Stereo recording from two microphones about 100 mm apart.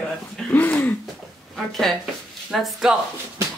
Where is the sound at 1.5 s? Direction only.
5° left (ahead or behind).